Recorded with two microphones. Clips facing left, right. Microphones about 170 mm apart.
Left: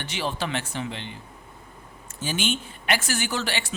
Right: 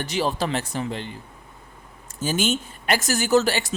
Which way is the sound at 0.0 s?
40° right (ahead or behind).